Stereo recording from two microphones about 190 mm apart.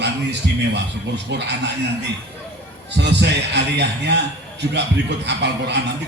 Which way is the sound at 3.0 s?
65° right (ahead or behind).